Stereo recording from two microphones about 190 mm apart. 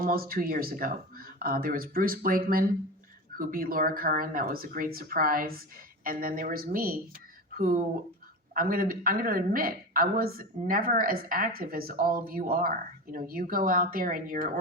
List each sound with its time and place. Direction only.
0.0 s a woman's voice: 50° right (ahead or behind)
8.5 s a woman's voice: 50° right (ahead or behind)